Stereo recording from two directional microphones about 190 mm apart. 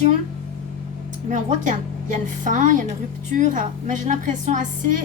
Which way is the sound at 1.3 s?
40° right (ahead or behind).